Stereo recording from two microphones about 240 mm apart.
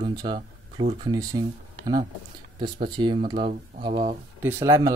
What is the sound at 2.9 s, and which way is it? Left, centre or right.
Speech, centre.